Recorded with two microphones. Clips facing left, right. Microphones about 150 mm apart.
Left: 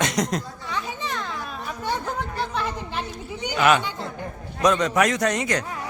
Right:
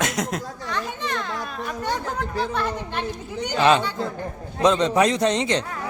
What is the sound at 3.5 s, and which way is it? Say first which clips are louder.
A man's voice: right 2 dB; 25° right (ahead or behind).